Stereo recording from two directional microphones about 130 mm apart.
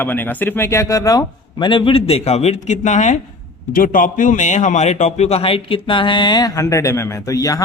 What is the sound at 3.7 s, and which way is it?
A man's voice, 90° left.